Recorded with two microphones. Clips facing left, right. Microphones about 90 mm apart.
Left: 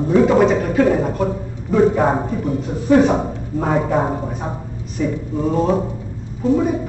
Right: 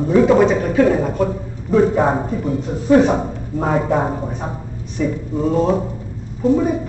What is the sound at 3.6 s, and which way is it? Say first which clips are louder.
Speech: even; 5° left (ahead or behind).